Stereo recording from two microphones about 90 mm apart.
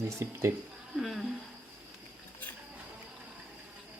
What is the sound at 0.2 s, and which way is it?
Speech, 30° right (ahead or behind).